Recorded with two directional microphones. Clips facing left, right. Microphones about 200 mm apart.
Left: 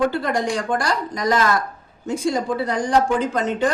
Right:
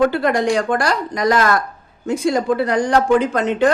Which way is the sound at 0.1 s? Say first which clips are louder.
Right 5 dB; 70° right (ahead or behind).